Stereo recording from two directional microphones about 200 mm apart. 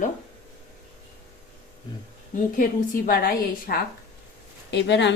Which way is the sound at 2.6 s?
45° left (ahead or behind).